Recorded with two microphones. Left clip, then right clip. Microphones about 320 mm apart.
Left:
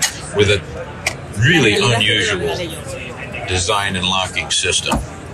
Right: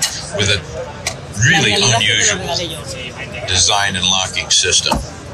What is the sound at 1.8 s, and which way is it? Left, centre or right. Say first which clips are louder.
Speech: right 2 dB; centre.